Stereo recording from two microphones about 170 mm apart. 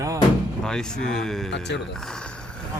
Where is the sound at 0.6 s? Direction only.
5° left (ahead or behind).